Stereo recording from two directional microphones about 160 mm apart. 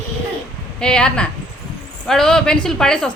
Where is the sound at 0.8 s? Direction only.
5° left (ahead or behind).